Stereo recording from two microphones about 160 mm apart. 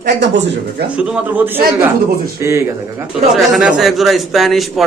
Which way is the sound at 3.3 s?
5° right (ahead or behind).